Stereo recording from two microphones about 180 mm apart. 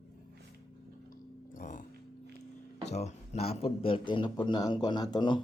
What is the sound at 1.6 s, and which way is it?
Music, 45° left (ahead or behind).